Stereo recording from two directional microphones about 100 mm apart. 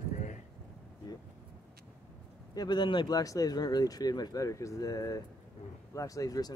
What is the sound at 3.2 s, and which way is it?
Speech, 35° left (ahead or behind).